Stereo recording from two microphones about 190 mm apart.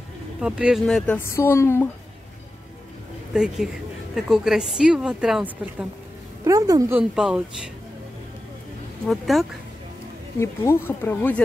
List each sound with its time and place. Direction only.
0.4 s speech: 5° right (ahead or behind); by 1.9 s 15° left (ahead or behind)
3.3 s a woman's voice: centre (ahead or behind)
6.4 s a woman's voice: 15° right (ahead or behind)
9.0 s a woman's voice: centre (ahead or behind)
10.4 s speech: 15° left (ahead or behind)